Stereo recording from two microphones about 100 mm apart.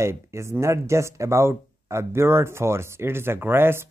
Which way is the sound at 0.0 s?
30° right (ahead or behind).